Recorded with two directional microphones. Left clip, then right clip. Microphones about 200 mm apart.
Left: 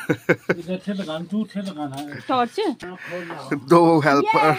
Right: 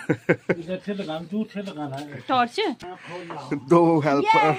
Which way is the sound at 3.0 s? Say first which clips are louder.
Left 4 dB; centre (ahead or behind).